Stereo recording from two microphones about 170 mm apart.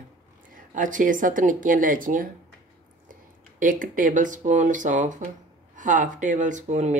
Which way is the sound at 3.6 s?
50° right (ahead or behind).